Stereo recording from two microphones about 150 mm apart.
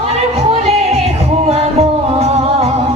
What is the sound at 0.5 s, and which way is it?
Music, 40° right (ahead or behind).